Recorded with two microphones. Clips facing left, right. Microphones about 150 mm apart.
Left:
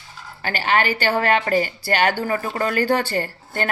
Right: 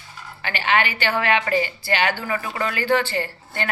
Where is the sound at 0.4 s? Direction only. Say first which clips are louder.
Left 2 dB; 40° left (ahead or behind).